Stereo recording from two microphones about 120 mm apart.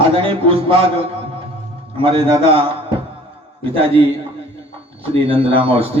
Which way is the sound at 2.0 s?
45° right (ahead or behind).